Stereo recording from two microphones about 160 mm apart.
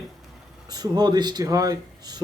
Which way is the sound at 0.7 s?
25° right (ahead or behind).